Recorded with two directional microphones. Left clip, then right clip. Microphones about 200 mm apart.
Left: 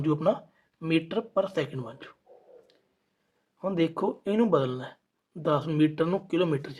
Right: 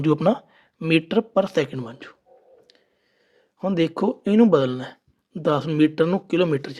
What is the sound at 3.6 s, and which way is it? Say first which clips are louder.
Speech: right 5 dB; 35° right (ahead or behind).